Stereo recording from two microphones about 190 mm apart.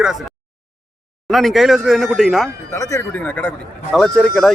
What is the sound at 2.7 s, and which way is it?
Speech, 15° left (ahead or behind).